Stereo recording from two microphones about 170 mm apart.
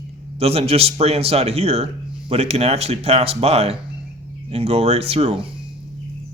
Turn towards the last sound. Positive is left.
turn(degrees=-35)  # may be behind; listen again after turning